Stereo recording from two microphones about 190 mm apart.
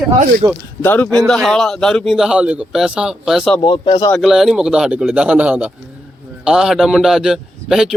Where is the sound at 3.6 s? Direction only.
25° left (ahead or behind).